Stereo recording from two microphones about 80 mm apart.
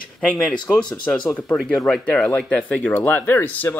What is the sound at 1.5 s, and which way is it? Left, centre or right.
Speech, centre.